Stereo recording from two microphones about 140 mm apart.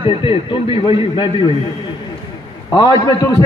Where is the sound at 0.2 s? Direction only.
40° left (ahead or behind).